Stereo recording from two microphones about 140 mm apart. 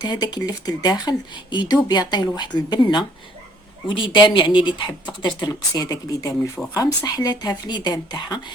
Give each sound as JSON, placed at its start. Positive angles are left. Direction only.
{"t": 0.0, "sound": "a woman's voice", "side_deg": 30}